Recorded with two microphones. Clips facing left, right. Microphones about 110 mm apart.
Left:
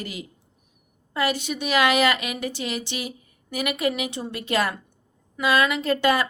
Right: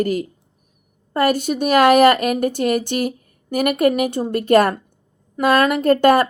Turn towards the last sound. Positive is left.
turn(degrees=-50)  # may be behind; listen again after turning